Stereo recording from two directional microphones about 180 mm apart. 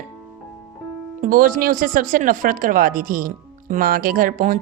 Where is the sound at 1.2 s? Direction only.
50° right (ahead or behind).